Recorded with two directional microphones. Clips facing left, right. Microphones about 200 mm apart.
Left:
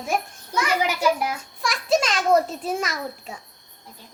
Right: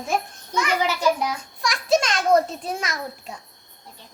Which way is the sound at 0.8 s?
10° left (ahead or behind).